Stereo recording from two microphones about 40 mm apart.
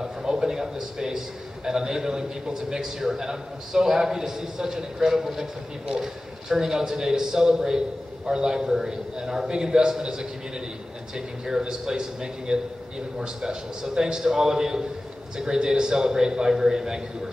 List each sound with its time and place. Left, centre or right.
0.0 s a man's voice: centre
6.5 s a man's voice: centre